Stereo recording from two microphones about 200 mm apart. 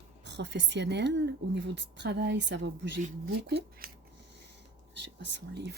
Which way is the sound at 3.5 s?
50° right (ahead or behind).